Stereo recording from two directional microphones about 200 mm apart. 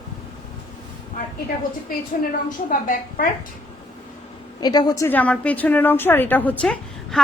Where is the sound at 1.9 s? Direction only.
45° left (ahead or behind).